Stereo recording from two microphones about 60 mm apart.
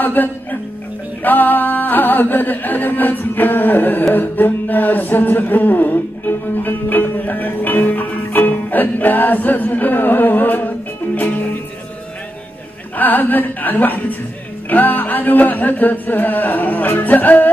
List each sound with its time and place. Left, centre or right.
0.0 s music: left
4.1 s mantra: left
11.1 s music: left
12.9 s a sound: left